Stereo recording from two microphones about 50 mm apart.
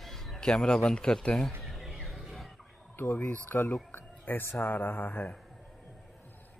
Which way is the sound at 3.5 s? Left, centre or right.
Left.